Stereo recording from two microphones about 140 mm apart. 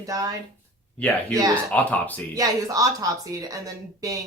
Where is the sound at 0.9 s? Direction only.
10° left (ahead or behind).